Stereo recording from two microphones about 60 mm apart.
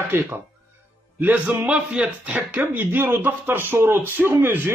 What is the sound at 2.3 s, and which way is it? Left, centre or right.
Speech, right.